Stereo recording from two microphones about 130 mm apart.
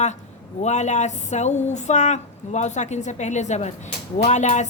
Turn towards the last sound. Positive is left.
turn(degrees=65)  # may be behind; listen again after turning